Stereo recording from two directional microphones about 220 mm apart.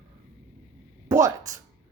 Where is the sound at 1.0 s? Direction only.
15° right (ahead or behind).